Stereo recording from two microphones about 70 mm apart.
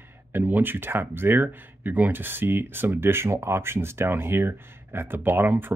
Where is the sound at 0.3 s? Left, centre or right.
Right.